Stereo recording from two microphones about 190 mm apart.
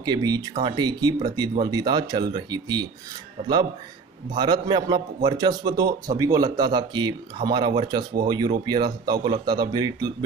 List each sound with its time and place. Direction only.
0.0 s a man's voice: 20° right (ahead or behind)
4.4 s a man's voice: 20° right (ahead or behind)